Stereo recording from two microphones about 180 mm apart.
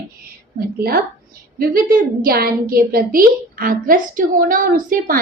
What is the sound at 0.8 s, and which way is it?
A woman's voice, 55° right (ahead or behind).